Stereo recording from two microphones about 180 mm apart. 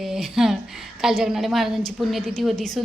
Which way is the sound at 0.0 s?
Centre (ahead or behind).